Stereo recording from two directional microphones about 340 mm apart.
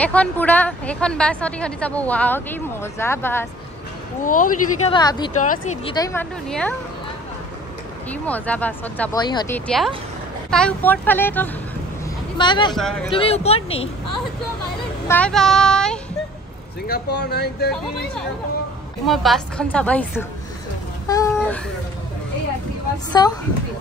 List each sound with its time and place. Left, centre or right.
0.0 s a woman's voice: centre
4.2 s a woman's voice: left; by 6.7 s centre
8.1 s a woman's voice: centre
12.7 s a woman's voice: centre
13.1 s a woman's voice: centre
15.0 s a woman's voice: centre
16.8 s speech: left
19.0 s a woman's voice: centre
21.1 s a sound: centre
23.2 s a woman's voice: centre